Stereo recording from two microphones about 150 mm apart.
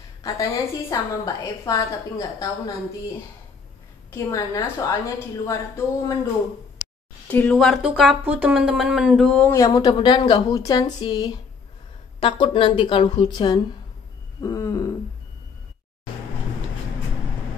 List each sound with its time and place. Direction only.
0.2 s a woman's voice: 25° left (ahead or behind)
4.1 s a woman's voice: 20° left (ahead or behind)
7.2 s speech: 10° left (ahead or behind)
7.5 s speech: 5° right (ahead or behind)
9.5 s a woman's voice: 20° left (ahead or behind)
14.4 s a woman's voice: 20° left (ahead or behind)